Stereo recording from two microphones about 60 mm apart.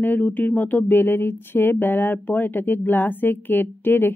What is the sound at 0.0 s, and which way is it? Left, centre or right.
Speech, left.